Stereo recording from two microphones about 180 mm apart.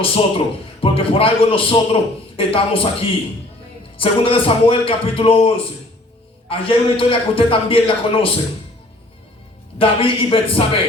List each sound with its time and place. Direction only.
0.0 s a man's voice: 30° left (ahead or behind)
9.7 s a man's voice: 30° left (ahead or behind)